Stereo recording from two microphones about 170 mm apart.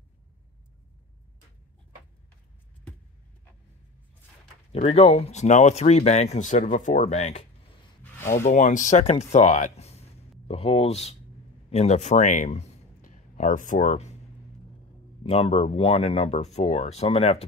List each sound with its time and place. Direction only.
4.7 s a man's voice: 35° left (ahead or behind)
15.2 s speech: 35° left (ahead or behind)